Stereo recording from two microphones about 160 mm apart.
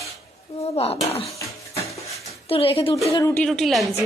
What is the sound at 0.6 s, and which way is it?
Speech, 40° left (ahead or behind).